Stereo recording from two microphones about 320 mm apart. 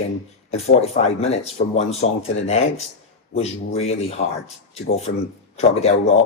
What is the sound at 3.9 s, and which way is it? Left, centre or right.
Speech, centre.